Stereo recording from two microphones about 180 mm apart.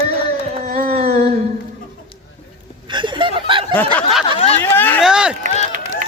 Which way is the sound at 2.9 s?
25° right (ahead or behind).